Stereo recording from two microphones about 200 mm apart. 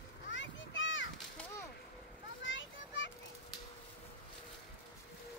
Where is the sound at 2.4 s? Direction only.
70° left (ahead or behind).